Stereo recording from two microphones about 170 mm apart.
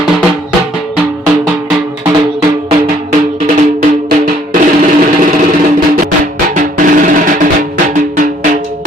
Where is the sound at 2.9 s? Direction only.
40° right (ahead or behind); by 4.4 s 65° right (ahead or behind).